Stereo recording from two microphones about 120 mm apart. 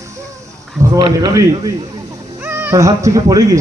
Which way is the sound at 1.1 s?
30° right (ahead or behind).